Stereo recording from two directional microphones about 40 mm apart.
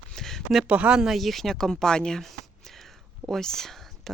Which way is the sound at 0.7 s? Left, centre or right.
Right.